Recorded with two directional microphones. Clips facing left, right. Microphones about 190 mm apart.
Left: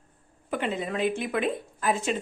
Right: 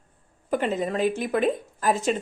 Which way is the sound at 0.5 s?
40° right (ahead or behind).